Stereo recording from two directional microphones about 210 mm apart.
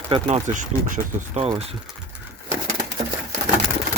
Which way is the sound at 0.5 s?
35° right (ahead or behind).